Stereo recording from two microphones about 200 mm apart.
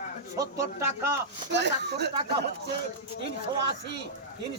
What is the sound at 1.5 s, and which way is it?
Speech, 60° right (ahead or behind).